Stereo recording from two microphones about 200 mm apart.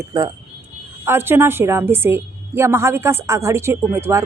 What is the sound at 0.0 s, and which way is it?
A woman's voice, 15° right (ahead or behind).